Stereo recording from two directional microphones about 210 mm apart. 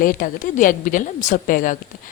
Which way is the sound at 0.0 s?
40° left (ahead or behind).